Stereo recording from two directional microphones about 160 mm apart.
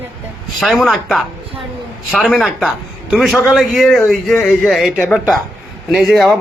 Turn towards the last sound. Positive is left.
turn(degrees=0)  # may be behind; listen again after turning